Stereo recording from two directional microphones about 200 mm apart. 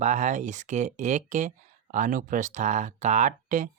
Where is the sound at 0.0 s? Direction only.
35° right (ahead or behind).